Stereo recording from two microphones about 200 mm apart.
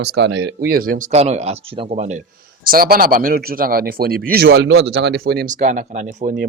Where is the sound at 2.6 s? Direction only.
45° right (ahead or behind).